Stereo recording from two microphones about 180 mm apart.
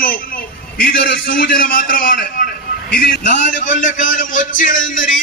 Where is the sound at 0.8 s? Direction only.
55° left (ahead or behind).